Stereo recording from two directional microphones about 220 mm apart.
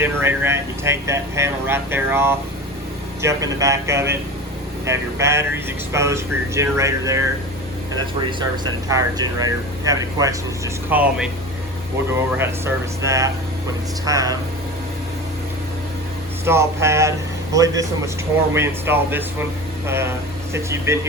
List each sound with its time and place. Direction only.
0.0 s speech: 10° right (ahead or behind)
12.4 s speech: 10° right (ahead or behind)
16.5 s speech: 10° right (ahead or behind)